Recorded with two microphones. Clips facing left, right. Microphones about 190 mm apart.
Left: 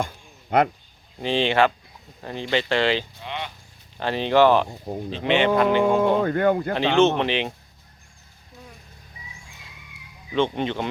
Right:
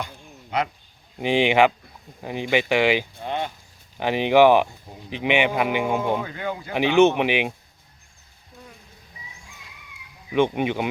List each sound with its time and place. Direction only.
0.5 s speech: 55° left (ahead or behind)
1.2 s speech: 15° right (ahead or behind)
3.2 s speech: 45° right (ahead or behind)
3.9 s speech: 15° right (ahead or behind)
6.0 s speech: 55° left (ahead or behind)
6.7 s speech: 10° right (ahead or behind)
10.3 s speech: 10° right (ahead or behind)